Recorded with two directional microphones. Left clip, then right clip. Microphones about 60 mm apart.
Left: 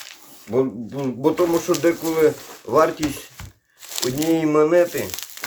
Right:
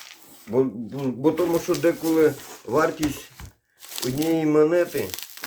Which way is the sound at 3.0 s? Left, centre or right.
Centre.